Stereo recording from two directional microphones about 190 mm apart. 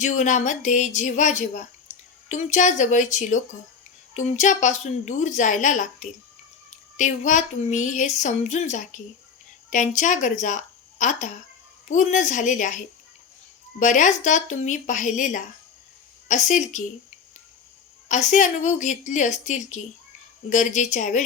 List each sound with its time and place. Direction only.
0.0 s a woman's voice: 40° left (ahead or behind)
18.1 s a woman's voice: 40° left (ahead or behind)